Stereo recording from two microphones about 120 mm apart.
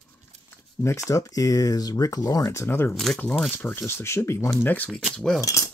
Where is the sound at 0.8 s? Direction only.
25° left (ahead or behind).